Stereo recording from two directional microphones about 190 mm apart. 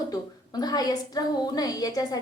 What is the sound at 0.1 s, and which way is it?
A woman's voice, 20° left (ahead or behind).